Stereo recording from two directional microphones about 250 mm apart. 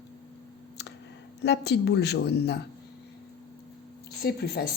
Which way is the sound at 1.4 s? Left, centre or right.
Left.